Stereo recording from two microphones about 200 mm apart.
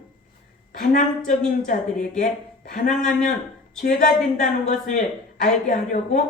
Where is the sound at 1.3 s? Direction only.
40° left (ahead or behind).